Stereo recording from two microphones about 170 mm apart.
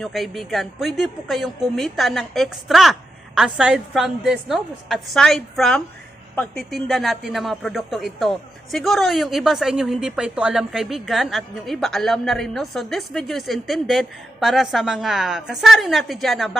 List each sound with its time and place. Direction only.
0.0 s a man's voice: centre (ahead or behind)